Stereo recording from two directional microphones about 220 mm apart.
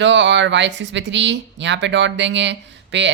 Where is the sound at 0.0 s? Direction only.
55° right (ahead or behind).